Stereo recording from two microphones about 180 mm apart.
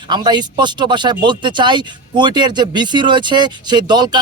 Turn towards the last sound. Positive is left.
turn(degrees=-25)  # may be behind; listen again after turning